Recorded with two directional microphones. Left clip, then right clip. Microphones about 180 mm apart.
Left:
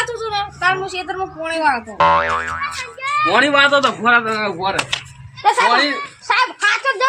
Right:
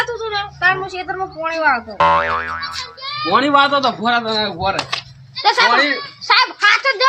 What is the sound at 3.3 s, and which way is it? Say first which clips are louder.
Speech: right 1 dB; 65° right (ahead or behind).